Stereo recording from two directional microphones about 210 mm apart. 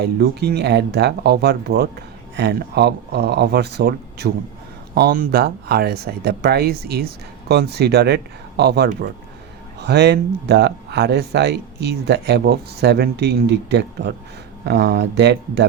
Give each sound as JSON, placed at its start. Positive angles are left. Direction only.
{"t": 0.0, "sound": "speech", "side_deg": -50}